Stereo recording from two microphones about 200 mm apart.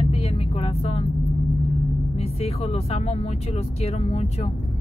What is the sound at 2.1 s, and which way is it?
Speech, 30° left (ahead or behind).